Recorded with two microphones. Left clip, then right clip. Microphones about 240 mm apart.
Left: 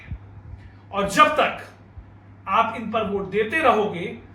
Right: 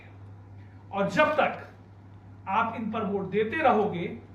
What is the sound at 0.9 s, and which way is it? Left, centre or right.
Speech, left.